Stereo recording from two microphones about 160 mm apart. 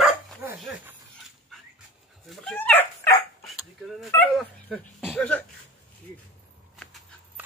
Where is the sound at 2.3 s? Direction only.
5° left (ahead or behind).